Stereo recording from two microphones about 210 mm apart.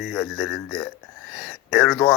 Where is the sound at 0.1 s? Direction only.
Centre (ahead or behind).